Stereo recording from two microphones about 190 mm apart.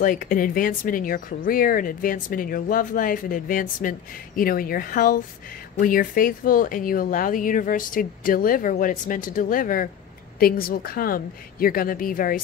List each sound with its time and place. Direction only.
0.0 s speech: 45° left (ahead or behind)